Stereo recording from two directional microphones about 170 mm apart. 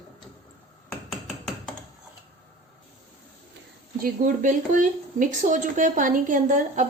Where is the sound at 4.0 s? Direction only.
55° right (ahead or behind).